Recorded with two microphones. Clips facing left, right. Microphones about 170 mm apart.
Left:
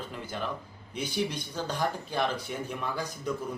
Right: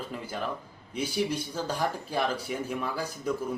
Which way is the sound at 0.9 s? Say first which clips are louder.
Right 2 dB; 5° right (ahead or behind).